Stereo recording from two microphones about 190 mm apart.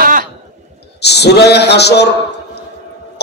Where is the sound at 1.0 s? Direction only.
60° left (ahead or behind).